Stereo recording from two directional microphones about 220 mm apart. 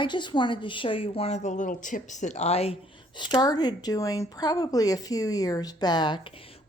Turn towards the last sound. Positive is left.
turn(degrees=20)  # may be behind; listen again after turning